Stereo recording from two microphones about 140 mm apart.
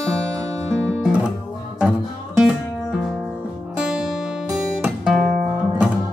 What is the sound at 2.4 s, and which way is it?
Music, 5° right (ahead or behind).